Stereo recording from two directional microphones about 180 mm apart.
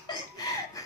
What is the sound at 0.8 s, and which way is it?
Chicken, 20° left (ahead or behind).